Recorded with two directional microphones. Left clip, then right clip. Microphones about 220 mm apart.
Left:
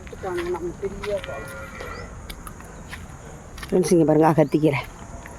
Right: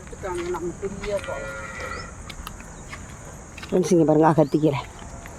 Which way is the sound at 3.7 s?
Centre (ahead or behind).